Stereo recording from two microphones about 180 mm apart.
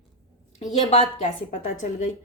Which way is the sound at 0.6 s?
40° left (ahead or behind).